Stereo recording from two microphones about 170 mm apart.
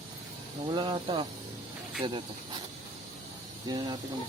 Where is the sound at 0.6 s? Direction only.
25° right (ahead or behind).